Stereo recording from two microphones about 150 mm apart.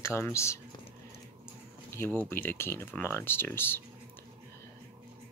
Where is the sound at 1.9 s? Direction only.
15° left (ahead or behind).